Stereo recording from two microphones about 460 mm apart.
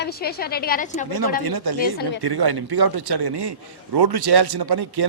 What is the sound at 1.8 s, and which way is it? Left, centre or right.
Speech, left.